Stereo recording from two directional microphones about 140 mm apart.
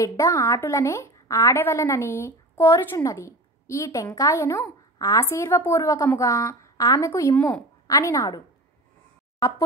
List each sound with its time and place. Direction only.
0.0 s a woman's voice: 25° left (ahead or behind)
7.3 s a woman's voice: 10° left (ahead or behind)
7.8 s a woman's voice: 25° left (ahead or behind)